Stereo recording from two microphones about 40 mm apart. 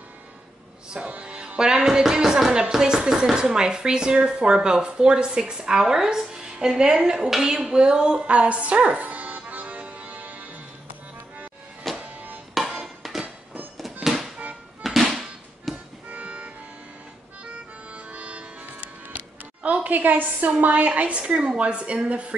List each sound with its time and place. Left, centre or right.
1.2 s music: right
1.6 s speech: centre
7.4 s music: centre; by 10.4 s right
12.0 s music: right
12.5 s music: centre
16.1 s music: right
17.9 s music: right
19.1 s a woman's voice: right